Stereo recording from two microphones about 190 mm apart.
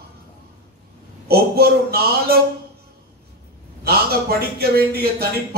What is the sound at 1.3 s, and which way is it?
A man's voice, 55° right (ahead or behind).